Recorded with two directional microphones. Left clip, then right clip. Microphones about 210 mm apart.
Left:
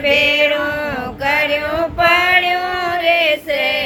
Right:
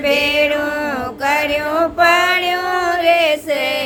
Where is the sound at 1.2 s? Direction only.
10° right (ahead or behind).